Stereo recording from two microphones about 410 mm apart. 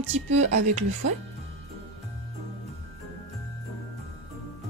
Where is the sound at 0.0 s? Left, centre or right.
Centre.